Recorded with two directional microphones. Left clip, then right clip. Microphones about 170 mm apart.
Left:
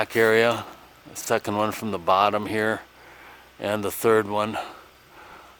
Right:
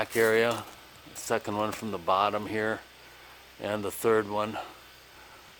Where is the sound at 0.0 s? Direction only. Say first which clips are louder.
Left 5 dB; 65° left (ahead or behind).